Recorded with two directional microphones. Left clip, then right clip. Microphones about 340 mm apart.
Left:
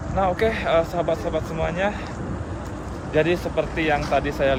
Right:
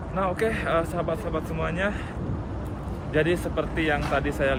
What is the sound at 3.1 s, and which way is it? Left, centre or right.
Speech, centre.